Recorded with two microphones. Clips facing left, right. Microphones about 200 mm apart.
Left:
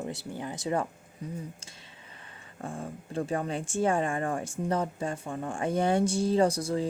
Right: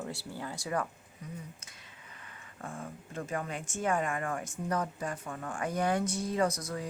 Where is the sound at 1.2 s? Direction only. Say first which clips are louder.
Left 6 dB; 30° left (ahead or behind).